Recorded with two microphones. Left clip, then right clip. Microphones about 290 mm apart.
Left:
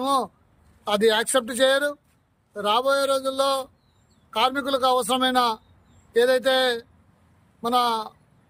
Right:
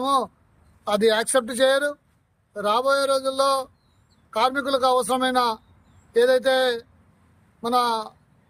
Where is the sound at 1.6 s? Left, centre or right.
Centre.